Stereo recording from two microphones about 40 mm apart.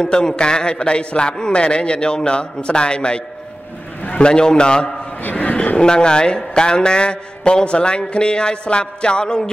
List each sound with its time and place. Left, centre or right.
0.0 s a man's voice: centre
4.2 s a man's voice: left
5.3 s a sound: left
5.8 s a man's voice: left